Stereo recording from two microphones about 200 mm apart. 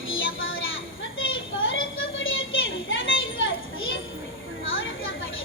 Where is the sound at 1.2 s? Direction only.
75° left (ahead or behind).